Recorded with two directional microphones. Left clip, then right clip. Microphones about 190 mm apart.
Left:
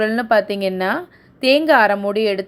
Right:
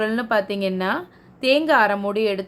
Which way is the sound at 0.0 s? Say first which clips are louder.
Left 5 dB; 20° left (ahead or behind).